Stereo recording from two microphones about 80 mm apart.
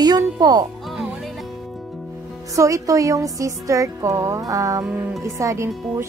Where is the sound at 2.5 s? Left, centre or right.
Right.